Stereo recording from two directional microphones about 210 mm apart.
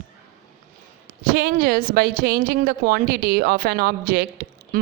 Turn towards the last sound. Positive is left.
turn(degrees=-45)  # may be behind; listen again after turning